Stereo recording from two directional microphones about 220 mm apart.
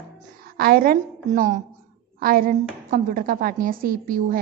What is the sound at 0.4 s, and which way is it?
A woman's voice, 45° right (ahead or behind).